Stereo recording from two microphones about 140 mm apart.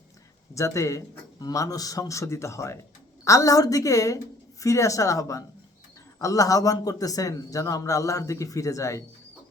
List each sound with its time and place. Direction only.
0.5 s a man's voice: 20° left (ahead or behind)